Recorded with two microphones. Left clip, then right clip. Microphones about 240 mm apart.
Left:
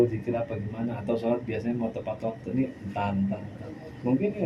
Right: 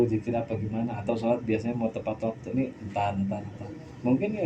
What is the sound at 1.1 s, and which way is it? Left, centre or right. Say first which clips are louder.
Speech: right 1 dB; right.